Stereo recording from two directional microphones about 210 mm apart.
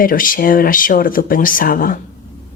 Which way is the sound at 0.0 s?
40° left (ahead or behind).